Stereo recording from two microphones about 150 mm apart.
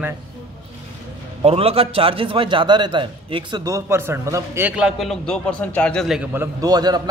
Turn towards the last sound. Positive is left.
turn(degrees=-25)  # may be behind; listen again after turning